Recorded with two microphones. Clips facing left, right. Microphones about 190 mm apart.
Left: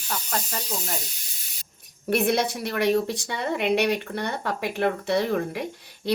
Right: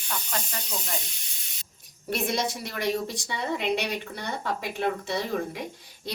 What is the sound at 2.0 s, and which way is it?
Speech, 60° left (ahead or behind).